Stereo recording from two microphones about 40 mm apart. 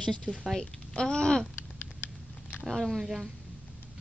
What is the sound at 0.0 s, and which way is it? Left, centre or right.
Speech, left.